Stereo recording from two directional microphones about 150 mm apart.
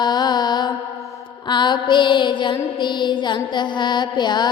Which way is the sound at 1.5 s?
30° left (ahead or behind).